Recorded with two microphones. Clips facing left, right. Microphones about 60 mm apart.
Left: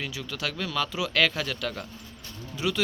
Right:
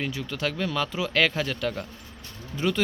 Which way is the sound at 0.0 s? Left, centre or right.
Right.